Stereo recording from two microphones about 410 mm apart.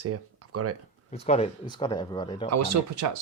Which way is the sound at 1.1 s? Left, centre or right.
Centre.